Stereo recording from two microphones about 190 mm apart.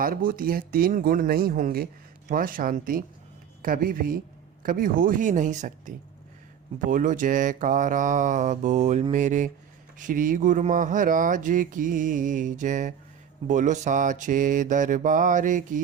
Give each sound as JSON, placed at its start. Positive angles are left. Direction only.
{"t": 0.0, "sound": "speech", "side_deg": -50}